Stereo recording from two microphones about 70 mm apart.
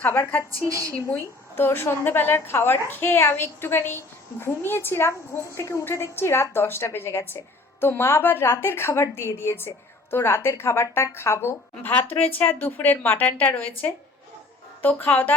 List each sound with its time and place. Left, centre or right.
0.0 s speech: left
1.5 s a woman's voice: left
5.8 s a woman's voice: left
11.8 s speech: left
14.8 s speech: left